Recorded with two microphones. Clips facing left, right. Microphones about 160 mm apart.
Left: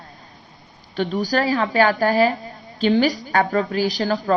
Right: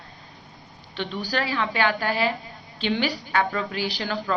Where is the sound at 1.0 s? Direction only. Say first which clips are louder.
Left 7 dB; 40° left (ahead or behind).